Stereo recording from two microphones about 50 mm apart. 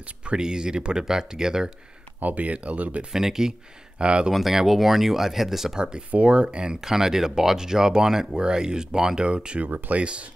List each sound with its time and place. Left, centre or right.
0.2 s speech: centre
2.1 s speech: right
3.1 s speech: centre
4.0 s speech: right
4.3 s speech: centre
5.8 s speech: centre
9.7 s speech: right
9.9 s speech: right